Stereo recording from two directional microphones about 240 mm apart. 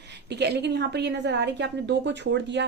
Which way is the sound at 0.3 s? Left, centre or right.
Right.